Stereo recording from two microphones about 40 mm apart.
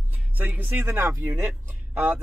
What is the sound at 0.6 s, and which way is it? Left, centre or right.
Speech, right.